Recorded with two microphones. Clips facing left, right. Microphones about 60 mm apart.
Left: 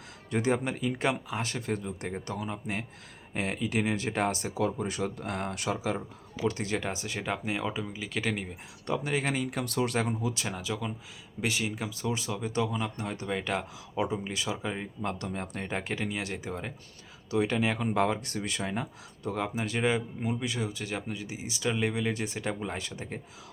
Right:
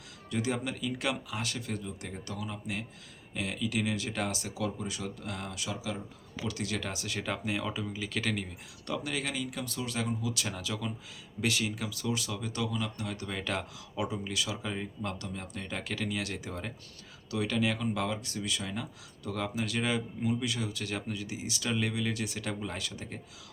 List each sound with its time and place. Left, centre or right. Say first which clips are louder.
0.3 s speech: left 4 dB; left
6.4 s speech: left 5 dB; left
10.4 s speech: left 2 dB; left
13.2 s speech: left 4 dB; centre
13.9 s speech: left 3 dB; left
15.2 s speech: left 5 dB; left; by 16.7 s centre
17.3 s speech: left 3 dB; left